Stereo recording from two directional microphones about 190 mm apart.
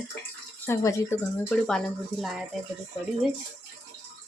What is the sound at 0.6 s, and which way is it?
Speech, 15° left (ahead or behind).